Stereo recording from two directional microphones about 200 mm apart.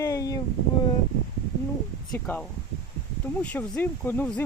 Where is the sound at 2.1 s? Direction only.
5° left (ahead or behind).